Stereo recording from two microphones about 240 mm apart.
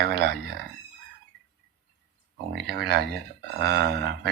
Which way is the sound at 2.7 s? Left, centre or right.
Right.